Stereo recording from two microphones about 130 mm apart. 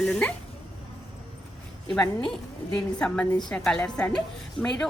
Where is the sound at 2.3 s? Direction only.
10° left (ahead or behind).